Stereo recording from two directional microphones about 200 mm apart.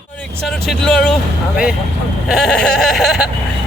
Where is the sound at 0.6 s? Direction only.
5° left (ahead or behind).